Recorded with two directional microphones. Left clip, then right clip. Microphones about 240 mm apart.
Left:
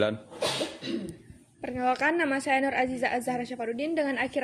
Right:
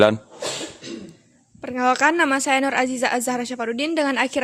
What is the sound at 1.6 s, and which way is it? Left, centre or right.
A woman's voice, right.